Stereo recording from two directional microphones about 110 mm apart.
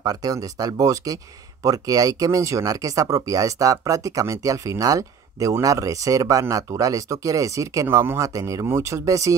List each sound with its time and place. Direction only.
0.0 s speech: 35° right (ahead or behind)